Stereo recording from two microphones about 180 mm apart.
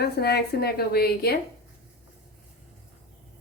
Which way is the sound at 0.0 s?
65° left (ahead or behind).